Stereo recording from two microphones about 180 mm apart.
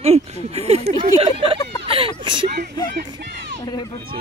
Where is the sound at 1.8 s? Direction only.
30° right (ahead or behind).